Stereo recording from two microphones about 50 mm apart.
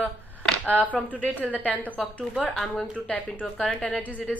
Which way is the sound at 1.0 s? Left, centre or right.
Left.